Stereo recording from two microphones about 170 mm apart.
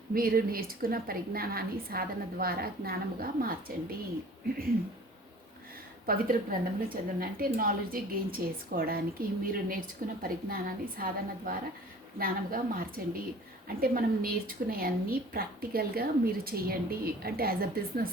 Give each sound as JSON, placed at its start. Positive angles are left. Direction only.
{"t": 0.1, "sound": "a woman's voice", "side_deg": -60}
{"t": 6.1, "sound": "a woman's voice", "side_deg": -55}